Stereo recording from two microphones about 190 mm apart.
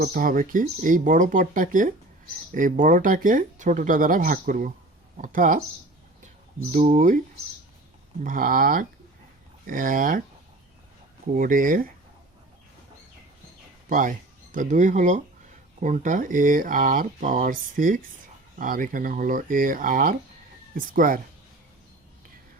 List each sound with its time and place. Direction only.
0.0 s speech: 50° right (ahead or behind)
6.7 s speech: 35° right (ahead or behind)
8.2 s speech: 45° right (ahead or behind)
11.3 s speech: 45° right (ahead or behind)
13.9 s speech: 45° right (ahead or behind)